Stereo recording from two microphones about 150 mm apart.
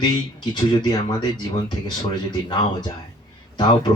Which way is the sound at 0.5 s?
30° left (ahead or behind).